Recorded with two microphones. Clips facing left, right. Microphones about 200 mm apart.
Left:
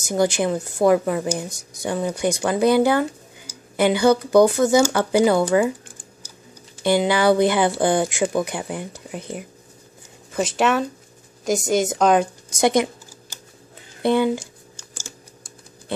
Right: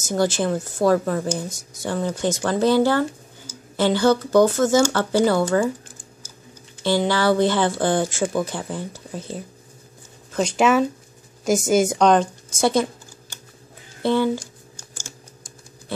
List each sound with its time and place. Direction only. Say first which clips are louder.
0.0 s speech: left 1 dB; 15° left (ahead or behind)
6.8 s speech: left 2 dB; 15° left (ahead or behind)
10.3 s a woman's voice: right 2 dB; centre (ahead or behind)
12.5 s speech: left 1 dB; 15° left (ahead or behind)
14.0 s speech: left 1 dB; 15° left (ahead or behind)